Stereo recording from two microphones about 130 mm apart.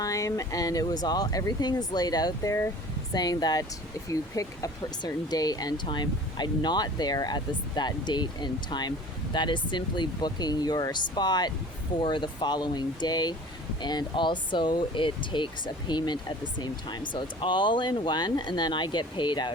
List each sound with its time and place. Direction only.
0.0 s speech: 25° left (ahead or behind)